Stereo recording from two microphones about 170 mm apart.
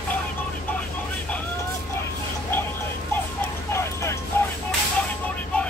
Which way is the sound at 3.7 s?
15° left (ahead or behind).